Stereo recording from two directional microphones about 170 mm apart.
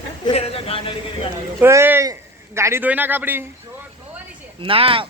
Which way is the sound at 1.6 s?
15° right (ahead or behind).